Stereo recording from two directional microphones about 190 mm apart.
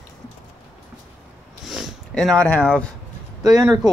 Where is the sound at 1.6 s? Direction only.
Centre (ahead or behind).